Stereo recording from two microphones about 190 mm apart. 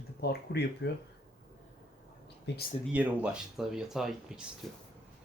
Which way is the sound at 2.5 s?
65° left (ahead or behind).